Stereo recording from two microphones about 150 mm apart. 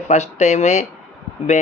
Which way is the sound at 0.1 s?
50° left (ahead or behind).